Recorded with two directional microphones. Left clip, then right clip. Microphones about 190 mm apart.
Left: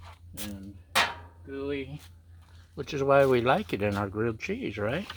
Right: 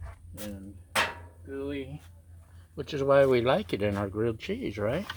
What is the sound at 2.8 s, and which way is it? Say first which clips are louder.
Speech: even; 35° left (ahead or behind).